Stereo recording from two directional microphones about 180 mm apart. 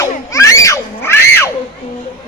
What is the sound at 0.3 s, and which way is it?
Screaming, 15° left (ahead or behind).